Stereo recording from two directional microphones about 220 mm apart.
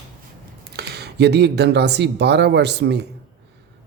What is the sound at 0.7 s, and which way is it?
Speech, 50° right (ahead or behind).